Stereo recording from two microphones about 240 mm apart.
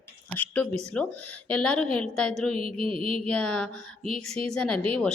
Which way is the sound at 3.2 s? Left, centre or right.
Centre.